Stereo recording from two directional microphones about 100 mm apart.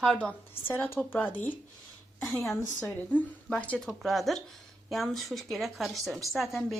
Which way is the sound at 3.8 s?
Centre (ahead or behind).